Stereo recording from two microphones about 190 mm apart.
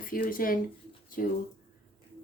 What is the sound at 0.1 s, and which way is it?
Speech, 45° left (ahead or behind).